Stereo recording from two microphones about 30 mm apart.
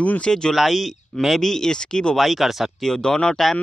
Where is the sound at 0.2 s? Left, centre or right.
Left.